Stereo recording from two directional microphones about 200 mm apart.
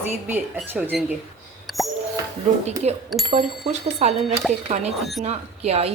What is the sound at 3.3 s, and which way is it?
Speech, 35° right (ahead or behind).